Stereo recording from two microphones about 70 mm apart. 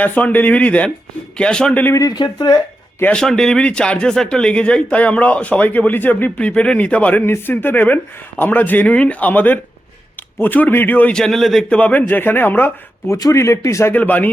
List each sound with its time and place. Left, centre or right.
0.0 s a man's voice: left
2.0 s speech: left
3.1 s speech: centre; by 6.4 s left
6.4 s a man's voice: centre
11.1 s a man's voice: centre
11.7 s a man's voice: centre
13.3 s speech: left
13.9 s a man's voice: left